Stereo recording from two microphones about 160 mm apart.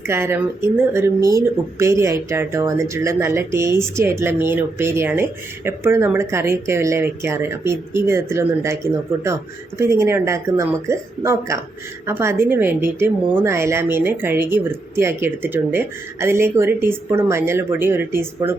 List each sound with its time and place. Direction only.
0.1 s speech: 15° right (ahead or behind)